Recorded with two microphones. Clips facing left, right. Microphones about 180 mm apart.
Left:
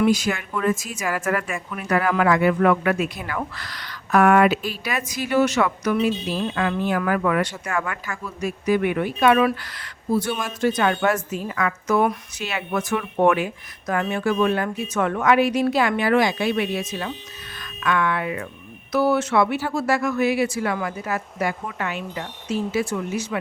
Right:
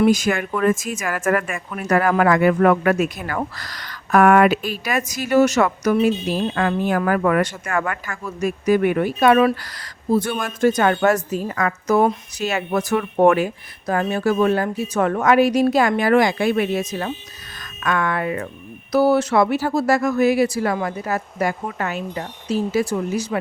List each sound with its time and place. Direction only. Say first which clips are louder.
0.0 s speech: right 3 dB; 45° right (ahead or behind)
10.1 s speech: right 3 dB; 50° right (ahead or behind)